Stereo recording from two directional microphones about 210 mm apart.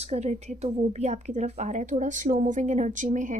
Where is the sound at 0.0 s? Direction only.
30° right (ahead or behind).